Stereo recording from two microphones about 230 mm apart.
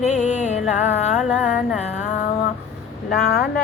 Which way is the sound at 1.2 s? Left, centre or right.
Centre.